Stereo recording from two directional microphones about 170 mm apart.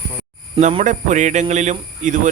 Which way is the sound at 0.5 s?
35° right (ahead or behind).